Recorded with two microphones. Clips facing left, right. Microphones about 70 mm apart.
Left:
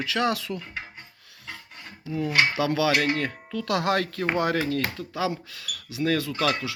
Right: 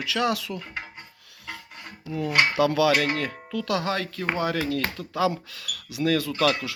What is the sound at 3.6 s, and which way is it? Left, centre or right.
Speech, left.